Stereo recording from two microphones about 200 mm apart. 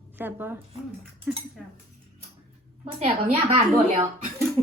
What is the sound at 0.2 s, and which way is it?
A woman's voice, 10° right (ahead or behind).